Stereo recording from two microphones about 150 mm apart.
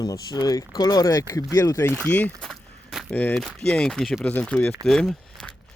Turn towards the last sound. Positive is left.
turn(degrees=5)  # may be behind; listen again after turning